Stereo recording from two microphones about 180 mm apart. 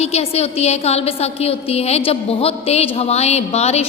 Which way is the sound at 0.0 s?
35° left (ahead or behind).